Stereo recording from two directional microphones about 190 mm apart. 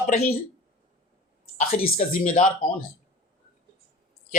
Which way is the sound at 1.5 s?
45° left (ahead or behind).